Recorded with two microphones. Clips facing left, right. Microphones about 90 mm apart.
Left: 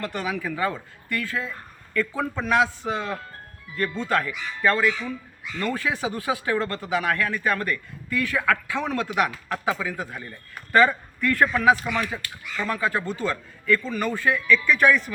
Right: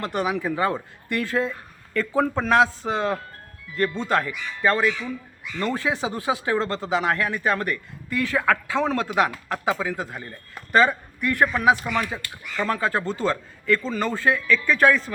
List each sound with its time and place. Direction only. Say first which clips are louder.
0.0 s a man's voice: right 4 dB; 20° right (ahead or behind); by 3.2 s 35° right (ahead or behind)
3.9 s speech: right 1 dB; 25° right (ahead or behind)
12.6 s a man's voice: right 2 dB; 35° right (ahead or behind)